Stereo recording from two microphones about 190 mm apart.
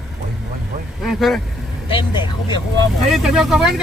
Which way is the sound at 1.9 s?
25° left (ahead or behind).